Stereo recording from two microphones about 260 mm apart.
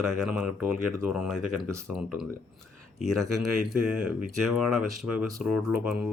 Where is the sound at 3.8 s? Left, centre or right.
Centre.